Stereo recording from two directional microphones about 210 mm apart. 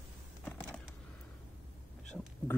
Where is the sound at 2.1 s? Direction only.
5° left (ahead or behind).